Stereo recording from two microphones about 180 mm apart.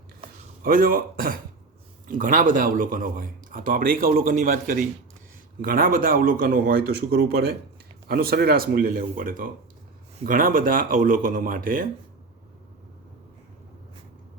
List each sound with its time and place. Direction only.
0.6 s speech: 55° right (ahead or behind)